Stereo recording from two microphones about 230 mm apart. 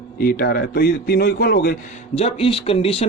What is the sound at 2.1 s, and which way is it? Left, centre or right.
Speech, left.